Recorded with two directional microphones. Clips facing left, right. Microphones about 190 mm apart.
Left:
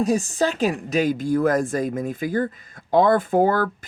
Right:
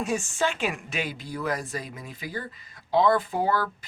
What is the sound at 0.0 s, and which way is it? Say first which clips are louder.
Speech: left 6 dB; 35° left (ahead or behind).